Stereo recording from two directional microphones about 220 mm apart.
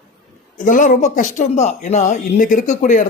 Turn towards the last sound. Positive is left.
turn(degrees=35)  # may be behind; listen again after turning